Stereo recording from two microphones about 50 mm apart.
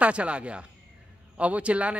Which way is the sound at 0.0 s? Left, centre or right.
Right.